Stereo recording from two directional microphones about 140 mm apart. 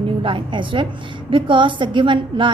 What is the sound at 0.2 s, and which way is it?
A woman's voice, 35° right (ahead or behind).